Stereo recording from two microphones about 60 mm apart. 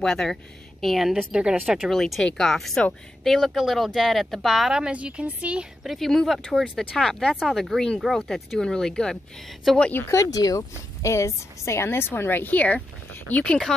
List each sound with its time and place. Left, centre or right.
0.0 s speech: centre
1.1 s speech: centre
2.0 s speech: centre; by 5.7 s right
5.9 s speech: centre
10.0 s speech: left
11.1 s speech: left